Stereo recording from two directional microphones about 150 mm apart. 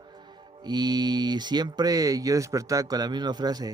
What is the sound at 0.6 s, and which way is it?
Speech, 25° right (ahead or behind).